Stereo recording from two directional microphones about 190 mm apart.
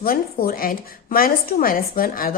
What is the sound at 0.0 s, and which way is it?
A woman's voice, 50° left (ahead or behind).